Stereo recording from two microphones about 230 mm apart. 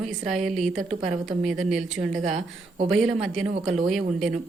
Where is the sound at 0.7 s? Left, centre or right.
Right.